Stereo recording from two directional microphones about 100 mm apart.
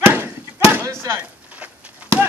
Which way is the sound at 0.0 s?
20° right (ahead or behind).